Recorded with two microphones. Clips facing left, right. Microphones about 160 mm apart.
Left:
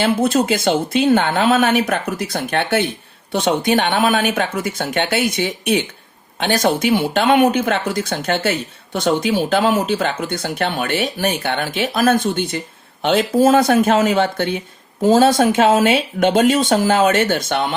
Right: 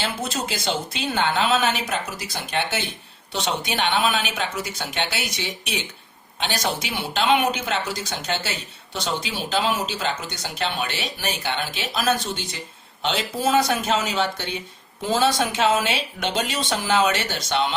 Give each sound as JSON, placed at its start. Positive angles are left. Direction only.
{"t": 0.0, "sound": "a woman's voice", "side_deg": 55}